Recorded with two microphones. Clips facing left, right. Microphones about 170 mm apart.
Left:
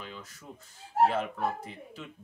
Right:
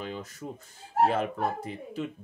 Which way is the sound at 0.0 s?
45° right (ahead or behind).